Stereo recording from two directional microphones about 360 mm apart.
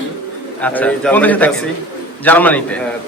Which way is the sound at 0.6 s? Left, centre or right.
Centre.